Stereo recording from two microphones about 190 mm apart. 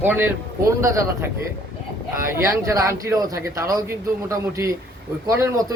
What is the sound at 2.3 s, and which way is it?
A man's voice, 15° right (ahead or behind).